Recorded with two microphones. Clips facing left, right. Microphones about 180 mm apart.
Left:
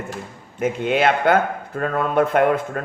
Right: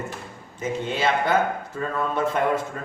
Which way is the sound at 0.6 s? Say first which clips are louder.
Left 6 dB; 60° left (ahead or behind).